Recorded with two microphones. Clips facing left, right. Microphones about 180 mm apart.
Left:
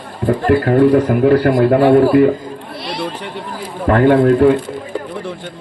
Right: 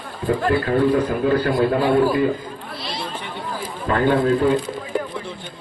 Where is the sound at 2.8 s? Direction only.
65° left (ahead or behind).